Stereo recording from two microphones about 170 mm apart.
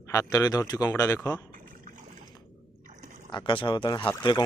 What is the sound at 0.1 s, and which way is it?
Speech, 20° left (ahead or behind).